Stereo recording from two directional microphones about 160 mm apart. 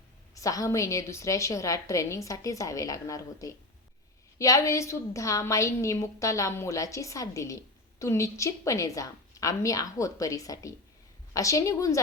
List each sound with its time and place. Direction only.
0.3 s a woman's voice: 20° left (ahead or behind)